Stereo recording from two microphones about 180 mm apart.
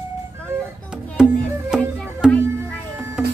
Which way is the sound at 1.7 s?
5° right (ahead or behind).